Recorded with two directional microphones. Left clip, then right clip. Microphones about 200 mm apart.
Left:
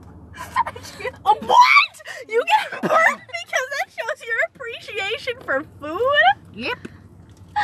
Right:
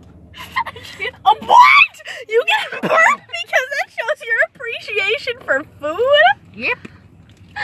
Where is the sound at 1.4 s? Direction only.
10° right (ahead or behind); by 6.3 s 30° right (ahead or behind).